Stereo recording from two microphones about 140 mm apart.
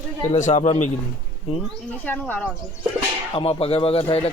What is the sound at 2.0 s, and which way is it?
Speech, 10° left (ahead or behind).